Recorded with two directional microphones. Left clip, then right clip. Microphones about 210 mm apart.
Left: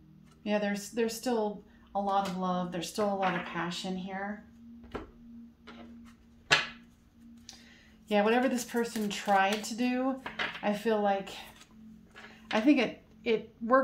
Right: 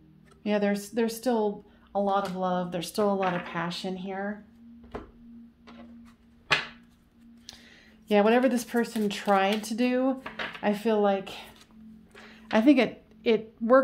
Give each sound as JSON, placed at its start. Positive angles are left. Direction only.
{"t": 0.4, "sound": "speech", "side_deg": -50}
{"t": 8.1, "sound": "a woman's voice", "side_deg": -55}